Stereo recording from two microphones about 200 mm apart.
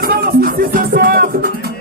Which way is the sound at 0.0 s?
45° right (ahead or behind).